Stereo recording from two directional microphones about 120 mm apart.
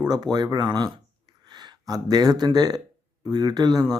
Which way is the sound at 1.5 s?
35° right (ahead or behind).